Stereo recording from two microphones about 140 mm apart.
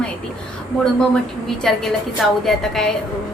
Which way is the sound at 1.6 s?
5° left (ahead or behind).